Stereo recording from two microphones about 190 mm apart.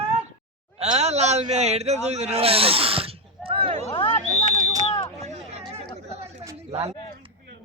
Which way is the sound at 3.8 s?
30° left (ahead or behind).